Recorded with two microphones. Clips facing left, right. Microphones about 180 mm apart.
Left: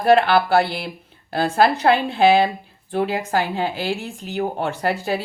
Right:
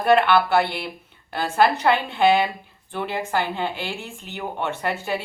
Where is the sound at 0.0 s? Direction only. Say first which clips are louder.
Left 2 dB; 35° left (ahead or behind).